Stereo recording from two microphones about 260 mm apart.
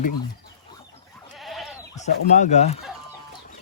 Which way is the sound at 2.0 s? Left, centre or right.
Left.